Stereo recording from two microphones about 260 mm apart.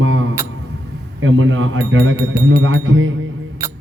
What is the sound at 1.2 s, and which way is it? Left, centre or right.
Speech, right.